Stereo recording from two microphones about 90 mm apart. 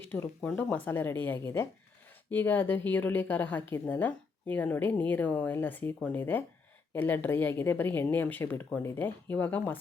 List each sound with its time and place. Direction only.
0.1 s a woman's voice: 20° left (ahead or behind)
1.4 s a woman's voice: 30° left (ahead or behind)